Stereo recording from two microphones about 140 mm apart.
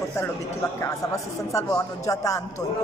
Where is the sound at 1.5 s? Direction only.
25° left (ahead or behind).